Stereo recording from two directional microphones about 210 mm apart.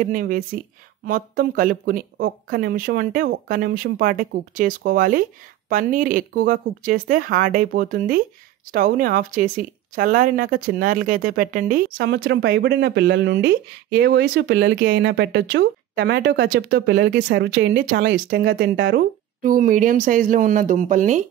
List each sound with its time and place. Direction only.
0.0 s speech: 40° right (ahead or behind)
12.0 s speech: 55° right (ahead or behind)
19.4 s speech: 40° right (ahead or behind)